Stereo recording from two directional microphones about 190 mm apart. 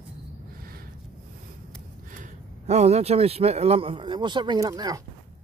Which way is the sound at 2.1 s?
40° right (ahead or behind).